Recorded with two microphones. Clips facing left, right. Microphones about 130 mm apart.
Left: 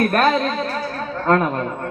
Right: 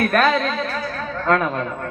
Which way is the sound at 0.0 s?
35° left (ahead or behind).